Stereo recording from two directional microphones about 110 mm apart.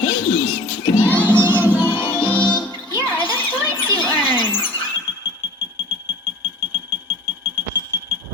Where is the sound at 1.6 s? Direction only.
20° left (ahead or behind).